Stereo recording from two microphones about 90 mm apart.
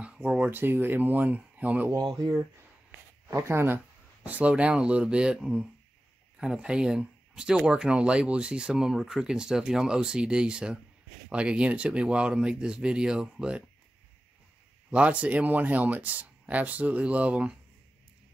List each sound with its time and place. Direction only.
0.0 s a sound: 10° right (ahead or behind)
0.5 s speech: 25° right (ahead or behind)
2.0 s speech: 55° right (ahead or behind)
3.3 s speech: 30° right (ahead or behind); by 13.7 s 10° right (ahead or behind)
14.9 s speech: 15° right (ahead or behind)